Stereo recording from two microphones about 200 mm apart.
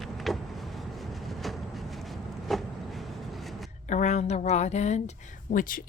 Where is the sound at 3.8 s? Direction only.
35° left (ahead or behind).